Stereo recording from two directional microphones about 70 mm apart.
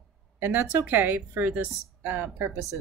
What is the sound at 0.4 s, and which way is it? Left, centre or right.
Speech, right.